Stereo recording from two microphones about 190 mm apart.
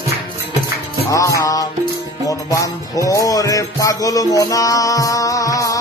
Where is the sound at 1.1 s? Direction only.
15° left (ahead or behind).